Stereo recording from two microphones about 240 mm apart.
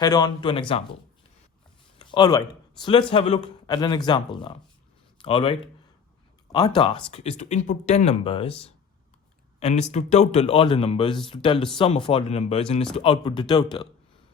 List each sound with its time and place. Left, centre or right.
0.0 s speech: centre
2.0 s speech: centre